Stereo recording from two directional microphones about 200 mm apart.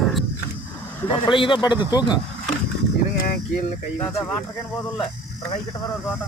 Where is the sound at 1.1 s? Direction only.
25° left (ahead or behind).